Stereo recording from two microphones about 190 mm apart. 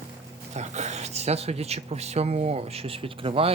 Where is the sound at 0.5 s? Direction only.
35° right (ahead or behind).